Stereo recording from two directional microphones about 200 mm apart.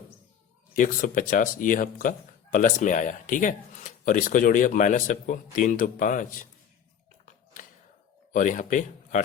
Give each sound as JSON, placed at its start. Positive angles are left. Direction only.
{"t": 0.8, "sound": "speech", "side_deg": 45}
{"t": 8.3, "sound": "speech", "side_deg": 40}